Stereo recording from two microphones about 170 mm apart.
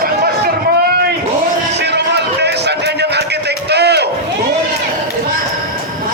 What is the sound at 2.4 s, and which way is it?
Music, 80° right.